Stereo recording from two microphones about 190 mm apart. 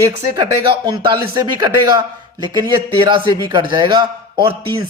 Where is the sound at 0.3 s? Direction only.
25° right (ahead or behind).